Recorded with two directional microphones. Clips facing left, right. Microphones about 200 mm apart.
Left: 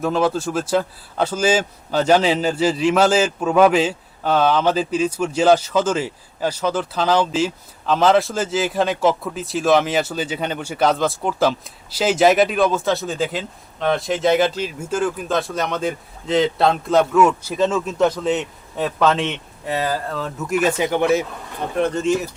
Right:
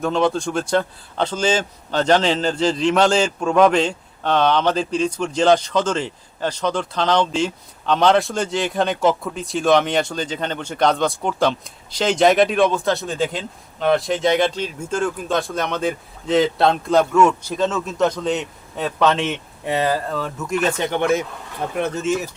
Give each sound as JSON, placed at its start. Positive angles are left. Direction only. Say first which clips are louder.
{"t": 0.0, "sound": "a man's voice", "louder": "even", "side_deg": 5}
{"t": 19.6, "sound": "speech", "louder": "right 2 dB", "side_deg": -20}
{"t": 20.1, "sound": "a man's voice", "louder": "even", "side_deg": 0}